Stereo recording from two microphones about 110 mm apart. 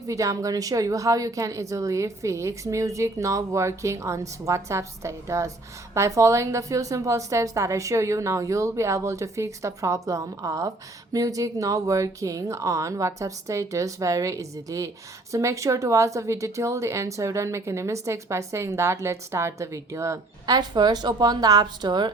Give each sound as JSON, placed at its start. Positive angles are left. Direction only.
{"t": 0.1, "sound": "a woman's voice", "side_deg": -30}
{"t": 20.6, "sound": "a woman's voice", "side_deg": -40}